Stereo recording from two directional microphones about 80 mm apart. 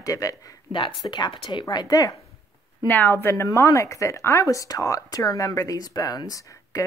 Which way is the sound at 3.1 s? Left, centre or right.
Left.